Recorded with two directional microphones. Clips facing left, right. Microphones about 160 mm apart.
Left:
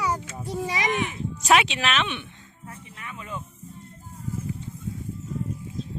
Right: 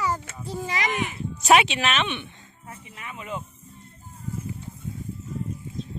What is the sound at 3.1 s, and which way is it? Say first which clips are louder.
Snake: right 2 dB; 15° right (ahead or behind).